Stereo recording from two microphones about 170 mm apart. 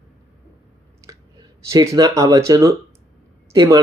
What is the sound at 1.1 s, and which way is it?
Speech, 20° right (ahead or behind).